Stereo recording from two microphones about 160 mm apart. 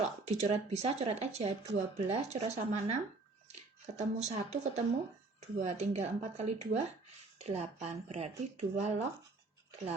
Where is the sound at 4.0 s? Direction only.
45° right (ahead or behind).